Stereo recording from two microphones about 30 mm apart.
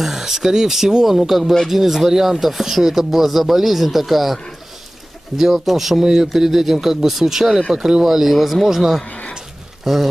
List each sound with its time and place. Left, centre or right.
0.0 s speech: centre
5.5 s speech: centre
7.7 s speech: right
8.0 s speech: centre